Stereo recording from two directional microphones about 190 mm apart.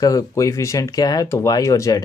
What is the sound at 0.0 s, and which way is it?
Speech, 15° left (ahead or behind).